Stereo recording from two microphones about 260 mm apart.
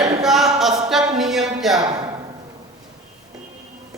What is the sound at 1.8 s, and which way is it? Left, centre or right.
Speech, centre.